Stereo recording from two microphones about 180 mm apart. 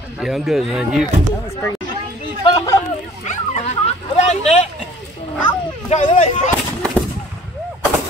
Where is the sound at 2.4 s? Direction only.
25° left (ahead or behind).